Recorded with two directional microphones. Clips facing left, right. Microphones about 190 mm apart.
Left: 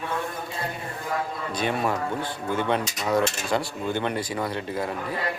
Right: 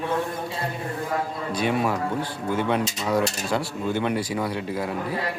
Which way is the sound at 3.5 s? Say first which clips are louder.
Right 2 dB; 5° right (ahead or behind).